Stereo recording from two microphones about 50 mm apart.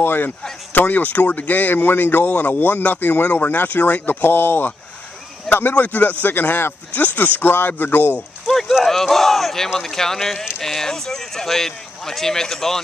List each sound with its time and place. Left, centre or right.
0.0 s speech: left
8.8 s a sound: centre
9.8 s speech: centre